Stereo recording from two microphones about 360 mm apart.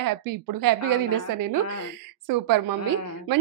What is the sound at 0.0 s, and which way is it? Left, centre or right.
A woman's voice, right.